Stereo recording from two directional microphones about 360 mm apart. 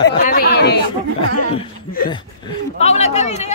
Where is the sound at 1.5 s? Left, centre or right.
Centre.